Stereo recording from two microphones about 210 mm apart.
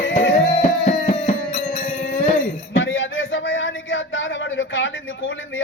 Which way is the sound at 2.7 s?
65° left (ahead or behind).